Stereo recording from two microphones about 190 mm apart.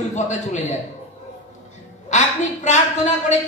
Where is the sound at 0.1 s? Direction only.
40° left (ahead or behind).